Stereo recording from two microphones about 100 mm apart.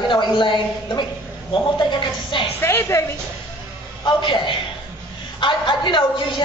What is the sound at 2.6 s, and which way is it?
Speech, 25° left (ahead or behind).